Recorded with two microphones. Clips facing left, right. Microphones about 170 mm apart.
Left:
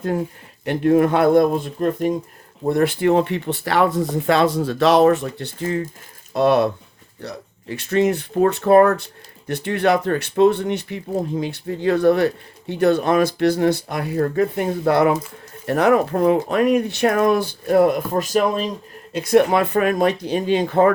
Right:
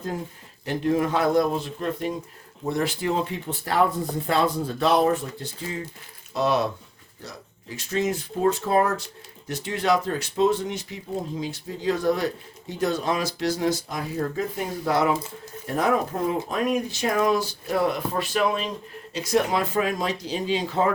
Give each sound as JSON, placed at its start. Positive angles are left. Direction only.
{"t": 0.6, "sound": "speech", "side_deg": 60}
{"t": 15.6, "sound": "speech", "side_deg": 70}
{"t": 19.1, "sound": "speech", "side_deg": 55}